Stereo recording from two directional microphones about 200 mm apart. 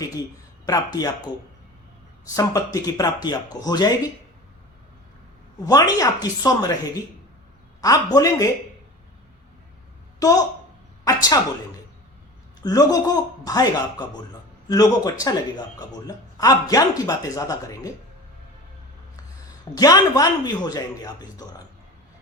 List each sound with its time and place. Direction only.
0.6 s a man's voice: 20° left (ahead or behind)
2.3 s a man's voice: 15° left (ahead or behind)
5.6 s a man's voice: 20° left (ahead or behind)
10.2 s speech: 15° left (ahead or behind)
11.0 s a sound: 20° left (ahead or behind)
12.6 s a man's voice: 20° left (ahead or behind)
19.7 s a man's voice: 20° left (ahead or behind)